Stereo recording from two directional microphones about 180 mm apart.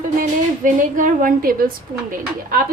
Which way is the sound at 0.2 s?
45° right (ahead or behind).